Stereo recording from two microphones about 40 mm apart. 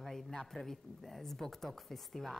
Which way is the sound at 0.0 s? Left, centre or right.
Centre.